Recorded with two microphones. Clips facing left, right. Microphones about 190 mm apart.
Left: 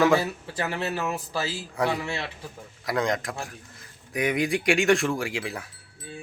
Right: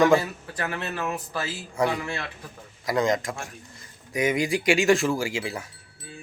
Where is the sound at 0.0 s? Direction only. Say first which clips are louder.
Right 2 dB; 5° left (ahead or behind).